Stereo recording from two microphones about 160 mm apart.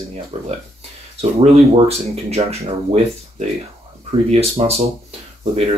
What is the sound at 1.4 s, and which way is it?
Speech, 40° right (ahead or behind).